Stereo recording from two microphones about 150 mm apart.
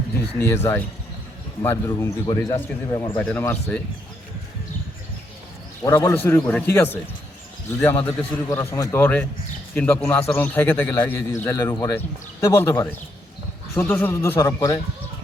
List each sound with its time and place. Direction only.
0.3 s a man's voice: 15° left (ahead or behind)
5.8 s a man's voice: 20° left (ahead or behind)
8.4 s a man's voice: 20° left (ahead or behind)